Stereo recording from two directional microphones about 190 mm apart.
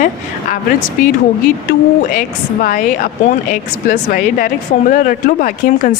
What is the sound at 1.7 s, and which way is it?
Speech, 50° left (ahead or behind).